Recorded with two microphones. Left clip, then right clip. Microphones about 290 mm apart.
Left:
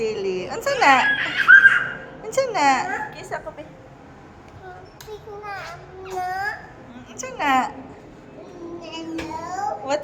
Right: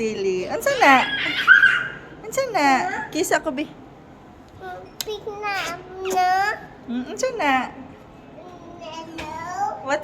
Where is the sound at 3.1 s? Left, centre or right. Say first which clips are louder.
Right 12 dB; right.